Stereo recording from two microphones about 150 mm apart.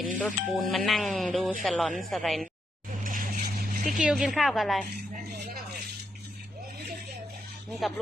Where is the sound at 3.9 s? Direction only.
5° right (ahead or behind).